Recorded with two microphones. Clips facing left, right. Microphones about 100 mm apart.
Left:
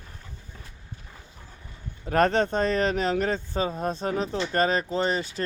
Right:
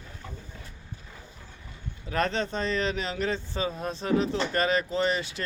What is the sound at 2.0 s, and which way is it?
Speech, 50° left (ahead or behind).